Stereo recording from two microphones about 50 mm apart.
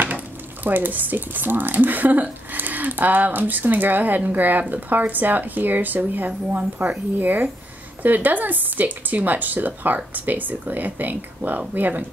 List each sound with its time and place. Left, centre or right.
0.7 s speech: right